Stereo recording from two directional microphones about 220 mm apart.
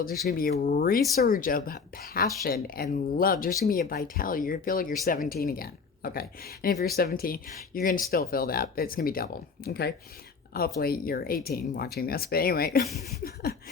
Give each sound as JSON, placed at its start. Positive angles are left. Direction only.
{"t": 0.3, "sound": "a woman's voice", "side_deg": 40}